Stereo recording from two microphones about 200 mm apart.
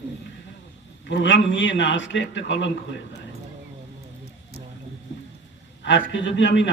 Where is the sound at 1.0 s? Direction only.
65° left (ahead or behind).